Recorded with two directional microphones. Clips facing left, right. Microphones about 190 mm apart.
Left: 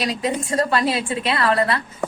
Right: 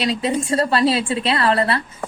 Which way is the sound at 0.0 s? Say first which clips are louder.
Right 3 dB; 30° right (ahead or behind).